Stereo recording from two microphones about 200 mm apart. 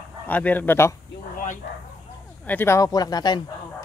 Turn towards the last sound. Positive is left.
turn(degrees=20)  # may be behind; listen again after turning